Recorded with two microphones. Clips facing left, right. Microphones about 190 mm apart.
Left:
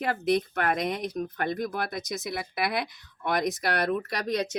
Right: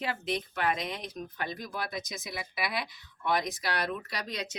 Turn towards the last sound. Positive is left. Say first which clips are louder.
# left 9 dB
turn(degrees=55)  # may be behind; listen again after turning